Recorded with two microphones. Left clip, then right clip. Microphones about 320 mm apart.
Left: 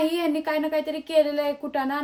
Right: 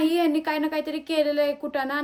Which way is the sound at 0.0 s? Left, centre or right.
Centre.